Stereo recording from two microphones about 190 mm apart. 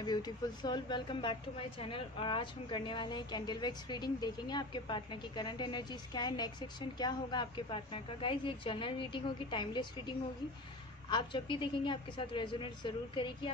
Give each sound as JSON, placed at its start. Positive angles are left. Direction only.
{"t": 0.0, "sound": "a woman's voice", "side_deg": 20}